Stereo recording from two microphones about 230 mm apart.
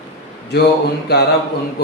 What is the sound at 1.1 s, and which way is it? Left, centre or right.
Speech, left.